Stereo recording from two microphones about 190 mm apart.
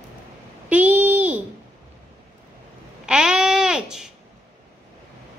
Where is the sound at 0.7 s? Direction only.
10° right (ahead or behind).